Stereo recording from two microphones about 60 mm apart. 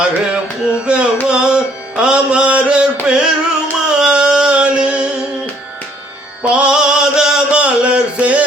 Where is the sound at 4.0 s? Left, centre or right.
Centre.